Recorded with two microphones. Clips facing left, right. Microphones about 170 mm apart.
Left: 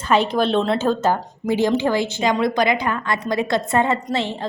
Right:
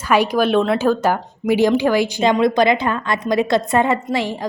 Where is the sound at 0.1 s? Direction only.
25° left (ahead or behind).